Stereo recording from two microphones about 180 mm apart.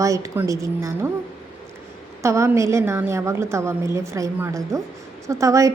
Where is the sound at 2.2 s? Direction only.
15° right (ahead or behind).